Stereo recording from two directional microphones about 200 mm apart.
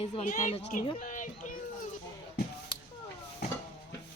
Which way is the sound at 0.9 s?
40° left (ahead or behind).